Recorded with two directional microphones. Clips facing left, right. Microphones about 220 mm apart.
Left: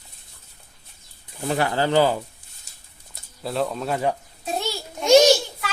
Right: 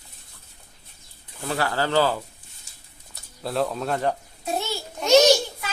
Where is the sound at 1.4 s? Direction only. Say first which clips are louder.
Left 3 dB; 20° left (ahead or behind).